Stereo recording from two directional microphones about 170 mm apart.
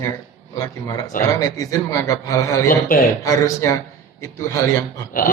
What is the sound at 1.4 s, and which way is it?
A man's voice, 20° left (ahead or behind).